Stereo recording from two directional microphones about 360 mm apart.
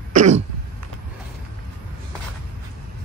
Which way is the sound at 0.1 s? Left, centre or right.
Right.